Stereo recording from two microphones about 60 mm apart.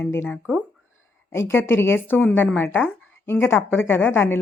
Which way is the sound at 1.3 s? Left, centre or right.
Left.